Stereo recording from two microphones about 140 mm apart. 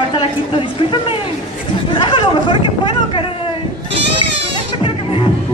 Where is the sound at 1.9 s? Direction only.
35° left (ahead or behind).